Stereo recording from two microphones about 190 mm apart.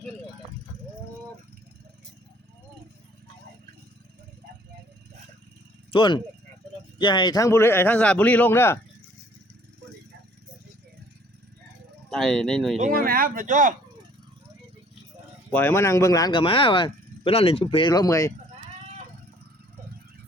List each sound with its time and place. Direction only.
5.9 s a man's voice: 25° left (ahead or behind)
12.1 s speech: 5° left (ahead or behind)
12.9 s speech: 50° right (ahead or behind)
15.5 s speech: 15° left (ahead or behind)